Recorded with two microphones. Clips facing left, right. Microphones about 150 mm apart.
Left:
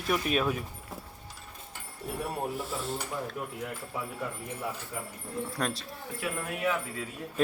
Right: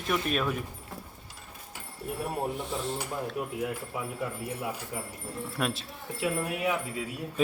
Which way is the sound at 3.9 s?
10° right (ahead or behind).